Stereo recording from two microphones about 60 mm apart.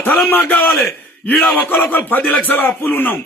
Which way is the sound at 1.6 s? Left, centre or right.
Left.